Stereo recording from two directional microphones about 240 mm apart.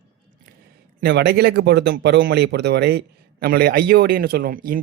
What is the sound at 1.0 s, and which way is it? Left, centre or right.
Speech, right.